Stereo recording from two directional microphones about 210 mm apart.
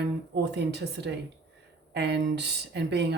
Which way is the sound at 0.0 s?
55° right (ahead or behind).